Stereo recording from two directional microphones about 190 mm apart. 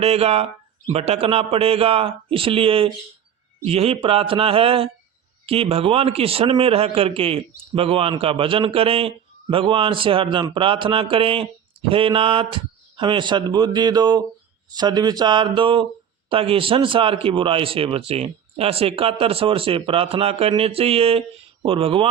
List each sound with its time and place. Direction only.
0.0 s a man's voice: 30° right (ahead or behind)